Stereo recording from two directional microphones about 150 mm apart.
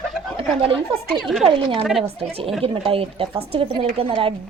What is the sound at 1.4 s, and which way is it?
A woman's voice, 40° right (ahead or behind).